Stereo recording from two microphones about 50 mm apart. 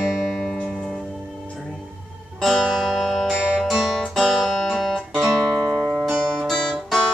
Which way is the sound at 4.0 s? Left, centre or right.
Centre.